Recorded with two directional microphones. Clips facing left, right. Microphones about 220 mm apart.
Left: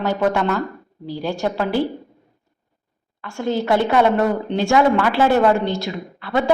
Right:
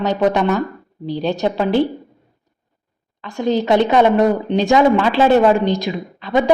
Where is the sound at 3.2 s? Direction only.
20° right (ahead or behind).